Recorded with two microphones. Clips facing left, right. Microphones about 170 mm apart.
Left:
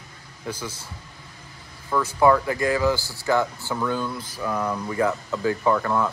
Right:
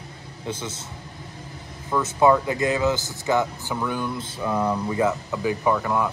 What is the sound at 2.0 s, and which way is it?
Speech, 20° right (ahead or behind).